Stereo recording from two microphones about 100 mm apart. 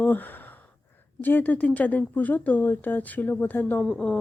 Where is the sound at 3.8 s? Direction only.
10° left (ahead or behind).